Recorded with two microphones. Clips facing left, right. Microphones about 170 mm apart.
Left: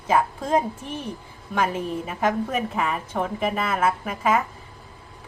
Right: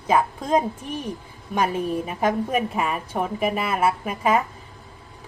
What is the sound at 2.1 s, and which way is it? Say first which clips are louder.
A woman's voice: left 1 dB; 15° right (ahead or behind).